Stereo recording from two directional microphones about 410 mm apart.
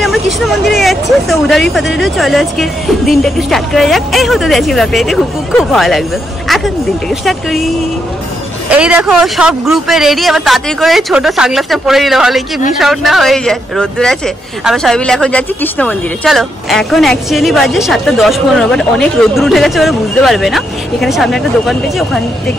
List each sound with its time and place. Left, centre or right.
0.7 s speech: centre
8.6 s speech: centre